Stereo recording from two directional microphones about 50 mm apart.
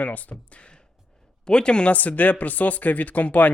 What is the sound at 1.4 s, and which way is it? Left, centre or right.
Speech, centre.